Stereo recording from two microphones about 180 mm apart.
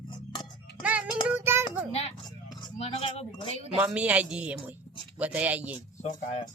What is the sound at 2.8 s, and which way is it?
Speech, 35° left (ahead or behind).